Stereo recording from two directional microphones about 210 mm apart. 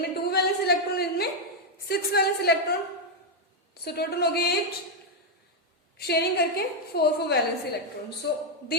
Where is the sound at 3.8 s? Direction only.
50° left (ahead or behind).